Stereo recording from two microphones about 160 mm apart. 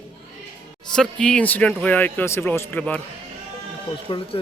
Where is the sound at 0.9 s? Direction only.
5° left (ahead or behind).